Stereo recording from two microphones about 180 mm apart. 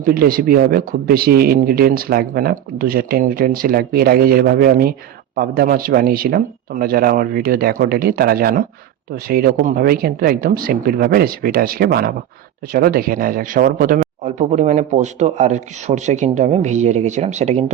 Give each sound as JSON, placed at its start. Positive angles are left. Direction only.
{"t": 0.0, "sound": "speech", "side_deg": -55}